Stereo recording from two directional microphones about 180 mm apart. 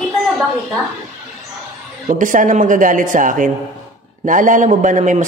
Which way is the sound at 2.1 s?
45° right (ahead or behind).